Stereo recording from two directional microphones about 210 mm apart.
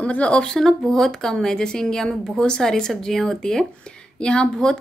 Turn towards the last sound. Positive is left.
turn(degrees=5)  # may be behind; listen again after turning